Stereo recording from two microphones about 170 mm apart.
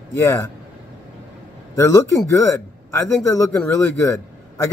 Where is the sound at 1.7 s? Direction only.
15° left (ahead or behind).